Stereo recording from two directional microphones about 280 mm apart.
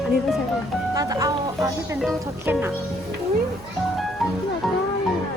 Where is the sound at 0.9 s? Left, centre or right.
Centre.